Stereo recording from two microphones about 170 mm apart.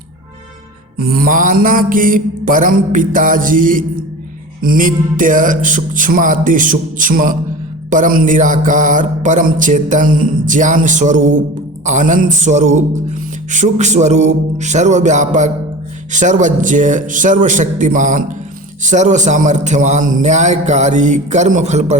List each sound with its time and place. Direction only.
0.9 s music: 60° right (ahead or behind); by 21.9 s 40° right (ahead or behind)